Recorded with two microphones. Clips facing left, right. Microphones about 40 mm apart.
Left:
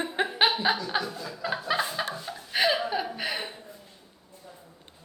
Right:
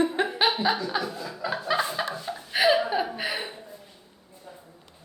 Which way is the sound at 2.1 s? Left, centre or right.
Centre.